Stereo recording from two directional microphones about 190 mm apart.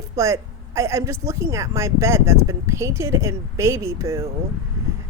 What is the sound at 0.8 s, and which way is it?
Speech, 15° right (ahead or behind).